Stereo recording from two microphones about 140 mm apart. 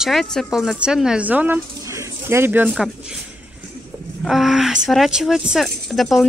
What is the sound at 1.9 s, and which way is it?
Bird, 20° right (ahead or behind).